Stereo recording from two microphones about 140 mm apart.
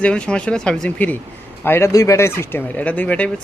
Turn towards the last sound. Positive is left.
turn(degrees=10)  # may be behind; listen again after turning